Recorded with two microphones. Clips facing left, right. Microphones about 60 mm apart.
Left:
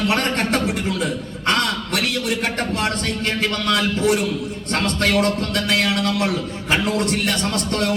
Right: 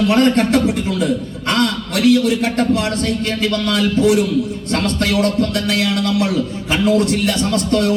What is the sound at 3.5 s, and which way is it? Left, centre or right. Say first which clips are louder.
A man's voice: right 4 dB; left.